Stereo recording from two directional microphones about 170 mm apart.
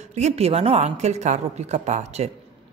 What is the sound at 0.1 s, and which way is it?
A woman's voice, 40° right (ahead or behind).